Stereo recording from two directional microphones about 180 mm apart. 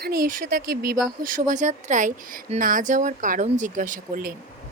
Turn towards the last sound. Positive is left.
turn(degrees=-50)  # may be behind; listen again after turning